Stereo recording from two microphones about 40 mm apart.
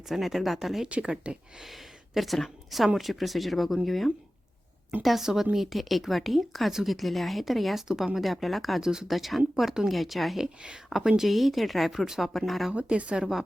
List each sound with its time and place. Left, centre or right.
0.1 s a woman's voice: centre
1.0 s speech: right
2.1 s a woman's voice: centre
7.9 s speech: centre
8.2 s a woman's voice: centre
8.8 s speech: centre
9.0 s a woman's voice: centre
12.7 s speech: right